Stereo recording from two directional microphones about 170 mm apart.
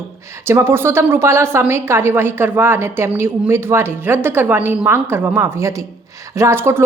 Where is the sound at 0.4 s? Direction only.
15° right (ahead or behind).